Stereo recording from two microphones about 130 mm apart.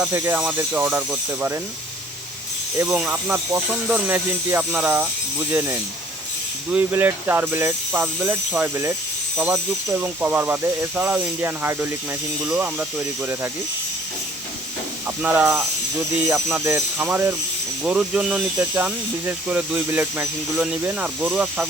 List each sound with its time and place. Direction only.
0.1 s speech: 15° right (ahead or behind)
3.0 s speech: 10° right (ahead or behind)
15.0 s speech: 15° right (ahead or behind)